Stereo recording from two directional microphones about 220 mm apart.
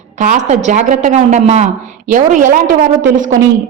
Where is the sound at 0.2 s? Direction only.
35° right (ahead or behind).